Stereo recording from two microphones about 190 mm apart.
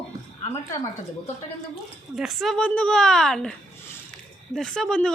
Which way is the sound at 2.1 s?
Centre (ahead or behind).